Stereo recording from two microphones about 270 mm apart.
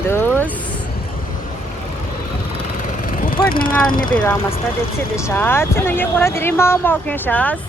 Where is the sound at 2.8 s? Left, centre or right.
Left.